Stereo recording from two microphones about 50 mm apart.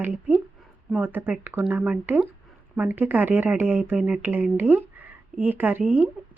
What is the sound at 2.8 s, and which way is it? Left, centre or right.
Speech, right.